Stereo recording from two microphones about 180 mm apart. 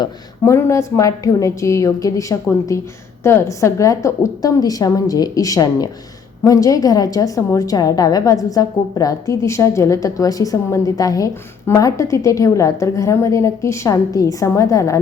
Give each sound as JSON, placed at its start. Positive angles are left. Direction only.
{"t": 0.0, "sound": "a woman's voice", "side_deg": 15}